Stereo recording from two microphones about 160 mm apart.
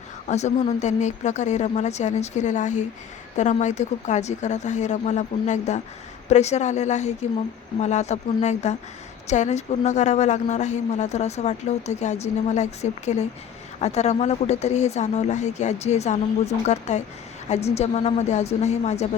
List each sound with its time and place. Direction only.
0.3 s a woman's voice: 45° left (ahead or behind)